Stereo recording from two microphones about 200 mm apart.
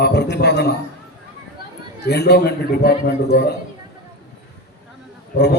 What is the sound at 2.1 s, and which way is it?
A man's voice, 55° left (ahead or behind).